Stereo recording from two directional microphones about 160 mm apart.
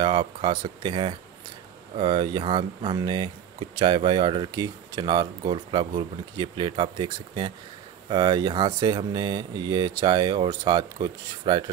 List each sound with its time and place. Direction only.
0.0 s speech: 30° right (ahead or behind)